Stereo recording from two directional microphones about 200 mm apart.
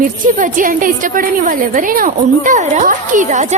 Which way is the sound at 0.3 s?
40° right (ahead or behind).